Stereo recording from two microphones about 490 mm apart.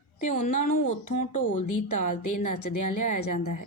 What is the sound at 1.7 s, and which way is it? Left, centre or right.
A woman's voice, left.